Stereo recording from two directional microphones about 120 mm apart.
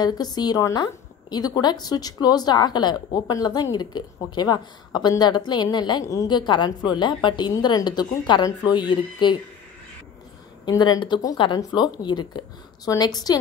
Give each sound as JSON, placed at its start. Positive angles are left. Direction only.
{"t": 0.0, "sound": "a woman's voice", "side_deg": 35}
{"t": 10.6, "sound": "a woman's voice", "side_deg": 35}